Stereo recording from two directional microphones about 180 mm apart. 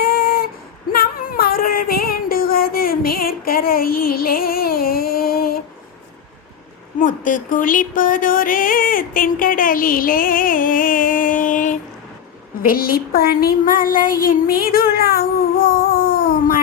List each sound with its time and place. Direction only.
0.0 s a sound: 55° left (ahead or behind)
0.9 s female singing: 55° left (ahead or behind)
7.0 s music: 50° left (ahead or behind)
12.6 s speech: 55° left (ahead or behind)